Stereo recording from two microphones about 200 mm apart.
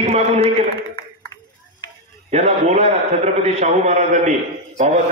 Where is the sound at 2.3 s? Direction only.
35° right (ahead or behind).